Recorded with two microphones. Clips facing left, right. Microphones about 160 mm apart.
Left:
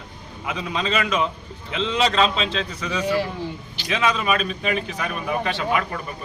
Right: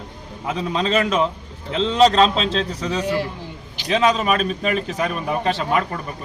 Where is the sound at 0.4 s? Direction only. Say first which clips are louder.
Right 4 dB; 35° right (ahead or behind).